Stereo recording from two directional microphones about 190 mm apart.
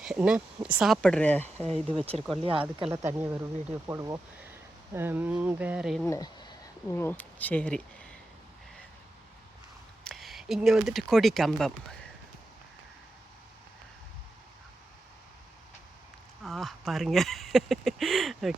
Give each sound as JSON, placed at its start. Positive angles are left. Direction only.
{"t": 0.0, "sound": "speech", "side_deg": -5}
{"t": 2.0, "sound": "speech", "side_deg": -30}
{"t": 3.2, "sound": "speech", "side_deg": -10}
{"t": 6.1, "sound": "speech", "side_deg": 20}
{"t": 10.0, "sound": "speech", "side_deg": 0}
{"t": 16.4, "sound": "speech", "side_deg": 0}